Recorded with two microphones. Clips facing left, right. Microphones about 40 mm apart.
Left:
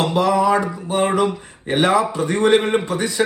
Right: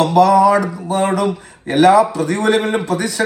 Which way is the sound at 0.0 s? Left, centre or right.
Left.